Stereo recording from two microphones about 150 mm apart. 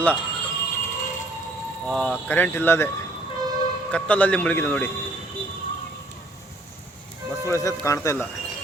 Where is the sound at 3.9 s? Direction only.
10° left (ahead or behind).